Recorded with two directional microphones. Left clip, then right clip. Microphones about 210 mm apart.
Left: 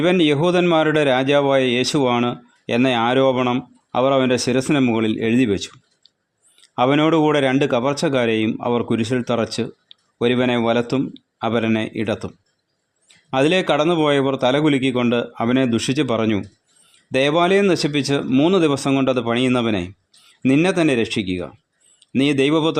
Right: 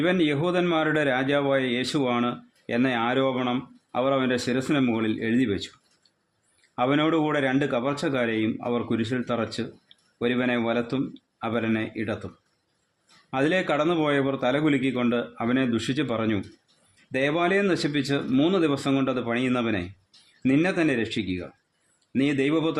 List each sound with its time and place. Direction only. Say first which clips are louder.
0.0 s a man's voice: left 7 dB; 30° left (ahead or behind)
13.3 s a man's voice: left 7 dB; 30° left (ahead or behind)